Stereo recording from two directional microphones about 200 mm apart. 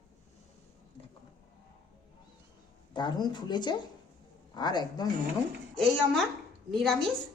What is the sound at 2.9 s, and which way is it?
A woman's voice, 20° left (ahead or behind).